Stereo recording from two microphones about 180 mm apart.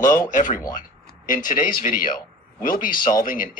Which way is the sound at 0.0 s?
15° left (ahead or behind).